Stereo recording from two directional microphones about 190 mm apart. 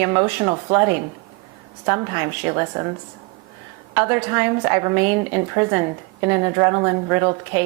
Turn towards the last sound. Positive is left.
turn(degrees=-15)  # may be behind; listen again after turning